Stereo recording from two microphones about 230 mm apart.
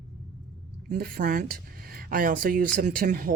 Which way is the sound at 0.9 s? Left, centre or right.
Right.